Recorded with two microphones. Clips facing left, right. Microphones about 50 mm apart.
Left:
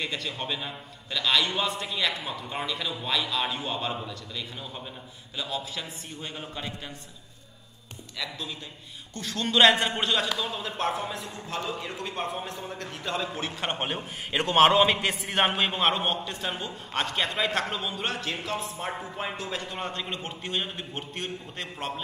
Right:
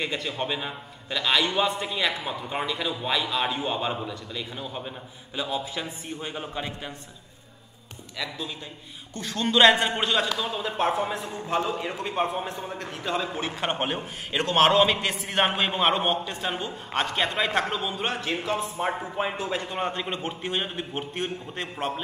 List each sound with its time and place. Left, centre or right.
0.0 s a man's voice: centre
9.1 s a man's voice: centre